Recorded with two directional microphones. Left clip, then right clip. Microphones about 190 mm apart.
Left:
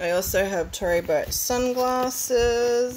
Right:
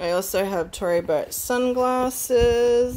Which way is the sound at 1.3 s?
55° right (ahead or behind).